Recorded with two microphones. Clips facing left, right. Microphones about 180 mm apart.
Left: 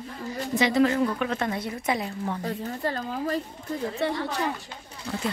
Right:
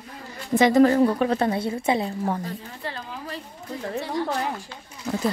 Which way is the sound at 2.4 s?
40° left (ahead or behind).